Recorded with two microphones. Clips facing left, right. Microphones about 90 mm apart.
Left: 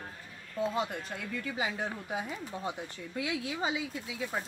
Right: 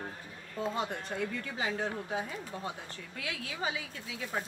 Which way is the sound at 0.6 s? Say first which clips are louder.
Left 2 dB; centre (ahead or behind).